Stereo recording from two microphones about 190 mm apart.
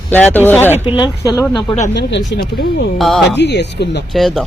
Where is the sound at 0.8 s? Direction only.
25° left (ahead or behind).